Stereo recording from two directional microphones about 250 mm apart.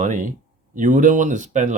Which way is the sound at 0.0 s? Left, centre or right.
Right.